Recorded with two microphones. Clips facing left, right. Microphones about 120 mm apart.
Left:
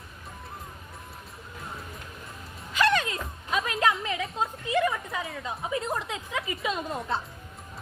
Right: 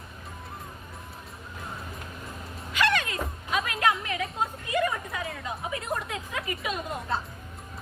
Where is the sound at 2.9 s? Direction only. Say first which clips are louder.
Left 1 dB; 25° left (ahead or behind).